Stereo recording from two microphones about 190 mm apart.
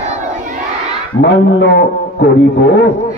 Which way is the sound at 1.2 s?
65° left (ahead or behind).